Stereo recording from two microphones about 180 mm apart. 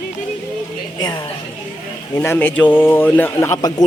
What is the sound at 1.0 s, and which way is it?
A woman's voice, 20° left (ahead or behind).